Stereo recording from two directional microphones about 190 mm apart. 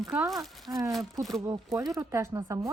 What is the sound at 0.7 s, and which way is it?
Speech, 15° right (ahead or behind).